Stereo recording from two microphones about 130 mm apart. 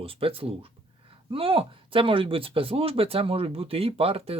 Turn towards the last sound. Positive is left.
turn(degrees=-50)  # may be behind; listen again after turning